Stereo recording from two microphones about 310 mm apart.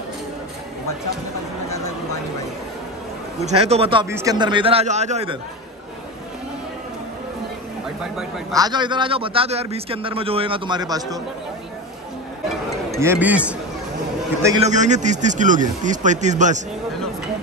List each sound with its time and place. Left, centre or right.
3.4 s a man's voice: centre
8.5 s a man's voice: centre
13.0 s a man's voice: centre
14.4 s a man's voice: centre